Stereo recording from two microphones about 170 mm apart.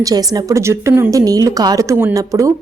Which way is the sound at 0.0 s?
20° right (ahead or behind).